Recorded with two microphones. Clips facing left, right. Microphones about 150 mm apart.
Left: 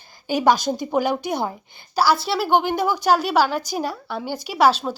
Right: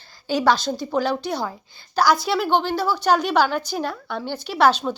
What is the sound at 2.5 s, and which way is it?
A woman's voice, 15° left (ahead or behind).